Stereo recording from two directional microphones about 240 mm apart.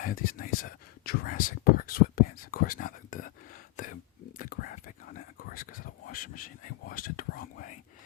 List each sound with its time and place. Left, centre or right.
0.0 s speech: left
4.4 s whispering: left